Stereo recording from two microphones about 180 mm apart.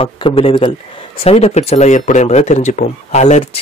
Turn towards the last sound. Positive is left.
turn(degrees=40)  # may be behind; listen again after turning